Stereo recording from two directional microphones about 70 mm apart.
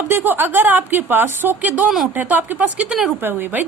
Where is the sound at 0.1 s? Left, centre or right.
Right.